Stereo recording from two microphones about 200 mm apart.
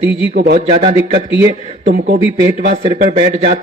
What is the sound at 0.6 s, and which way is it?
Speech, 25° right (ahead or behind).